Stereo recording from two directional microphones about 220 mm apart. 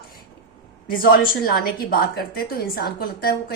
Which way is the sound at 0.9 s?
40° left (ahead or behind).